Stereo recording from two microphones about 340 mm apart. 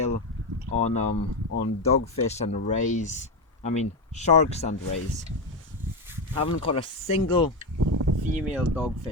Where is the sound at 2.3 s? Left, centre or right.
Centre.